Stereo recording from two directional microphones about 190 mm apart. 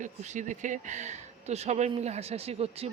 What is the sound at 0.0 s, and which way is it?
Speech, 40° right (ahead or behind).